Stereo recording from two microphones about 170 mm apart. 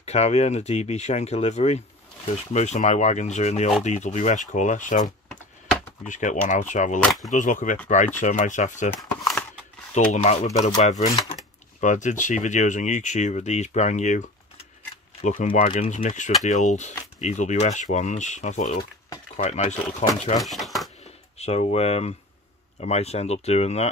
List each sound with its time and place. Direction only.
0.0 s speech: 40° left (ahead or behind)
5.3 s computer keyboard: 5° left (ahead or behind)
6.0 s speech: 45° left (ahead or behind)
7.0 s speech: centre (ahead or behind)
7.2 s speech: 50° left (ahead or behind)
9.9 s speech: 45° left (ahead or behind)
15.2 s speech: 45° left (ahead or behind)
20.3 s speech: centre (ahead or behind)
21.4 s speech: 40° left (ahead or behind)